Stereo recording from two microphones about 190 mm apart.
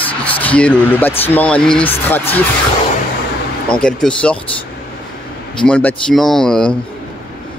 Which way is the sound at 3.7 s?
5° left (ahead or behind).